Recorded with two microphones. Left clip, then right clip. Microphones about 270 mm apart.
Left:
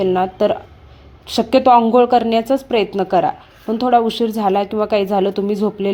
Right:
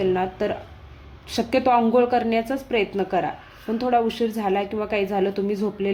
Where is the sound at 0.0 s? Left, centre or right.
Left.